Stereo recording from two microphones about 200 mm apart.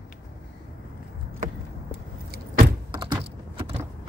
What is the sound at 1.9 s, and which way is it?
Vehicle, 55° right (ahead or behind).